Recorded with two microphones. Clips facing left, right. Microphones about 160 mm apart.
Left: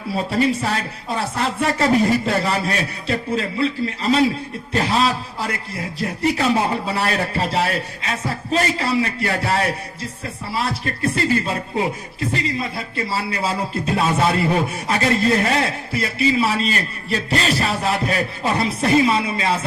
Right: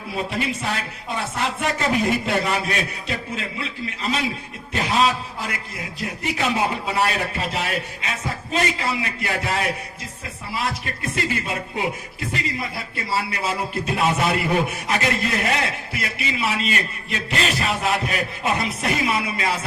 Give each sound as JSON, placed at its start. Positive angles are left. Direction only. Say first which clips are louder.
{"t": 0.3, "sound": "speech", "louder": "left 10 dB", "side_deg": 35}